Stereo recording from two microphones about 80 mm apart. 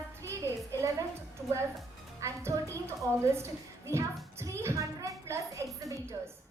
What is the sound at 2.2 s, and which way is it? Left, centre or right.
Speech, right.